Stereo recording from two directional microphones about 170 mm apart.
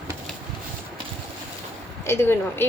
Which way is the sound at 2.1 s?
15° left (ahead or behind).